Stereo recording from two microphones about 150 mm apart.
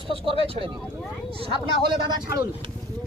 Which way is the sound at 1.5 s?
30° right (ahead or behind).